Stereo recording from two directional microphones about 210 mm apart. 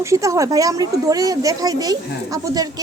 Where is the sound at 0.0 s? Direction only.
15° right (ahead or behind).